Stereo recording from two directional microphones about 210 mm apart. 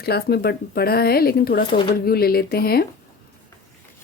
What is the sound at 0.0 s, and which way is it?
Speech, 50° left (ahead or behind).